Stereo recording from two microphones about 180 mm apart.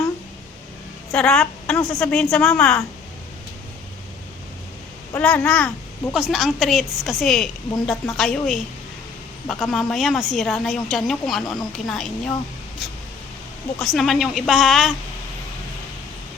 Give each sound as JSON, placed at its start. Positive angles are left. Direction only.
{"t": 1.1, "sound": "a woman's voice", "side_deg": 5}
{"t": 5.2, "sound": "a child's voice", "side_deg": 5}
{"t": 11.4, "sound": "speech", "side_deg": 25}
{"t": 11.9, "sound": "a woman's voice", "side_deg": 0}
{"t": 13.7, "sound": "a woman's voice", "side_deg": 0}